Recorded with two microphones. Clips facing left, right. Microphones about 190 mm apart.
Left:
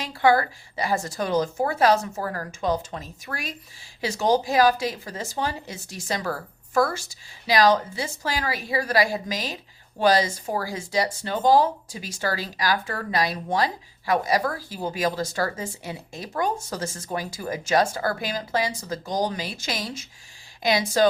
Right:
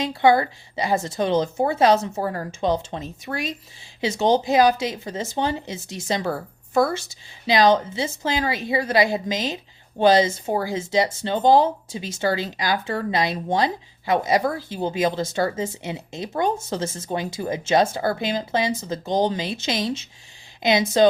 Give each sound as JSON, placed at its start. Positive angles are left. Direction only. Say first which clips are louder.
{"t": 0.0, "sound": "speech", "louder": "right 3 dB", "side_deg": -20}